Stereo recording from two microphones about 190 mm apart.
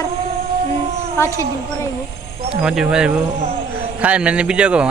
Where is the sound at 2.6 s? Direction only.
5° right (ahead or behind).